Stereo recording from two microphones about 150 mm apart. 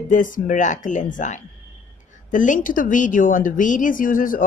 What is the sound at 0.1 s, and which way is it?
A woman's voice, 60° left (ahead or behind).